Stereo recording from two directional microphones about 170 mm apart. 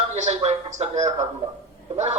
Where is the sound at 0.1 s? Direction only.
40° right (ahead or behind).